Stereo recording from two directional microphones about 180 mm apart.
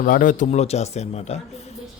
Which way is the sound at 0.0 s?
50° left (ahead or behind).